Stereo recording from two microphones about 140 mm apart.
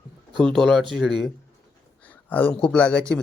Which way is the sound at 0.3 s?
5° left (ahead or behind).